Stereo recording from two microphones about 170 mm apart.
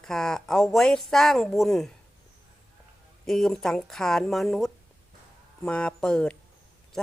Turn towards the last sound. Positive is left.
turn(degrees=5)  # may be behind; listen again after turning